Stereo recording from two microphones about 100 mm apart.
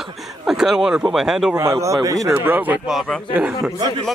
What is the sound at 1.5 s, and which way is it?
Speech, 30° right (ahead or behind).